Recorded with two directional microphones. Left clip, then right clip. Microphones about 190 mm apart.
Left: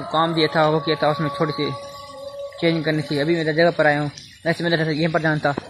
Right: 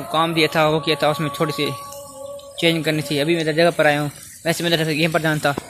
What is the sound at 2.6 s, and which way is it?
Speech, 5° right (ahead or behind).